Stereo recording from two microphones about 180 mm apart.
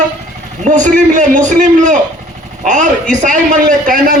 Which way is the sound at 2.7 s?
45° right (ahead or behind).